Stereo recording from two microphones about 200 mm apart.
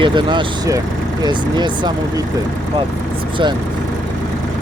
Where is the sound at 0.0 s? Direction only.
25° right (ahead or behind).